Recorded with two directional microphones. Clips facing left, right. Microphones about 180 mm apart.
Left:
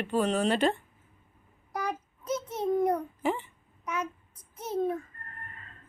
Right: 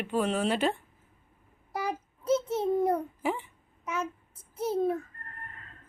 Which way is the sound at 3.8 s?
25° right (ahead or behind).